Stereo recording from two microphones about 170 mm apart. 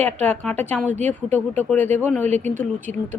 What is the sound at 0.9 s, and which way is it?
Speech, 45° right (ahead or behind).